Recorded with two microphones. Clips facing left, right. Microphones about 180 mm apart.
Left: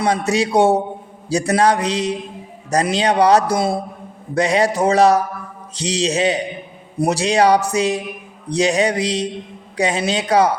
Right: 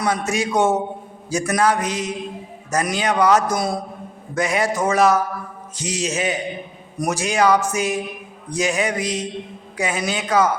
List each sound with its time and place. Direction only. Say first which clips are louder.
0.0 s a man's voice: left 4 dB; 35° left (ahead or behind)